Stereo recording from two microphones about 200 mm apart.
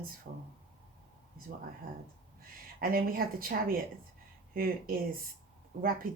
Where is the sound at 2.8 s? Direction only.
45° right (ahead or behind).